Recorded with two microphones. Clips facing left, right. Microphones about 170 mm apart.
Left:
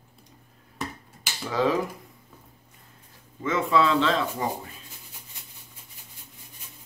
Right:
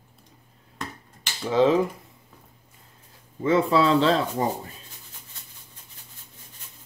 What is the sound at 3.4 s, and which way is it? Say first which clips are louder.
Speech: right 3 dB; 35° right (ahead or behind).